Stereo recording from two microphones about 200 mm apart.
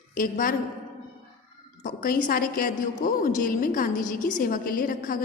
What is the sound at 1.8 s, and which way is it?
A woman's voice, 45° left (ahead or behind).